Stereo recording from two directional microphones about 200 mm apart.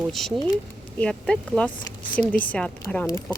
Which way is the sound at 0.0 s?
Centre (ahead or behind).